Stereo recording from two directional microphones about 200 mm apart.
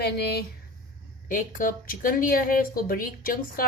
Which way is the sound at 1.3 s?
40° left (ahead or behind).